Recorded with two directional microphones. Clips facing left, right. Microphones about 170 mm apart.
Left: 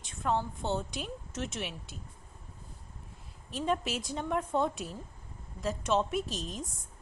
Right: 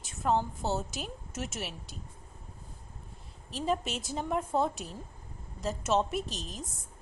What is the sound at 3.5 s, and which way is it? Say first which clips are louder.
A woman's voice: even; centre (ahead or behind).